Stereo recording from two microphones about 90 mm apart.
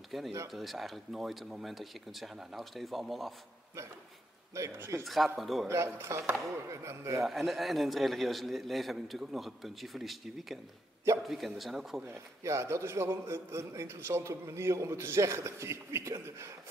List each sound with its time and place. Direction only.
0.1 s a man's voice: centre (ahead or behind)
4.6 s a man's voice: 30° right (ahead or behind)
5.0 s a man's voice: centre (ahead or behind)
5.7 s a man's voice: 30° right (ahead or behind)
7.2 s a man's voice: centre (ahead or behind)
12.1 s a man's voice: 30° right (ahead or behind)